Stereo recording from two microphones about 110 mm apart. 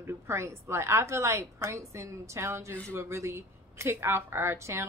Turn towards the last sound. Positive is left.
turn(degrees=-25)  # may be behind; listen again after turning